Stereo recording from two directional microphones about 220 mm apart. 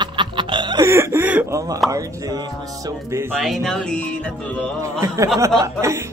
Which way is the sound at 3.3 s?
Centre (ahead or behind).